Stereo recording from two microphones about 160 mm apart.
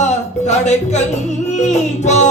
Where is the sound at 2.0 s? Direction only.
45° left (ahead or behind).